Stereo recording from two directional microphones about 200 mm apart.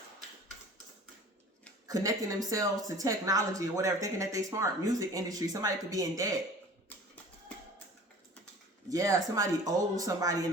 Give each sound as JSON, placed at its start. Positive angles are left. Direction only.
{"t": 1.9, "sound": "a woman's voice", "side_deg": -15}
{"t": 8.9, "sound": "a woman's voice", "side_deg": -15}